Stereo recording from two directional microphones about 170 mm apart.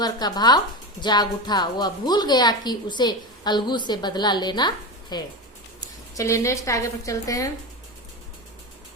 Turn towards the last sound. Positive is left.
turn(degrees=20)  # may be behind; listen again after turning